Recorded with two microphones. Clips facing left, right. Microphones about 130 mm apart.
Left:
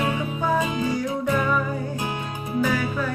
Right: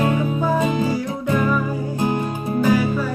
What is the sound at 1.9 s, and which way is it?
Music, 40° right (ahead or behind).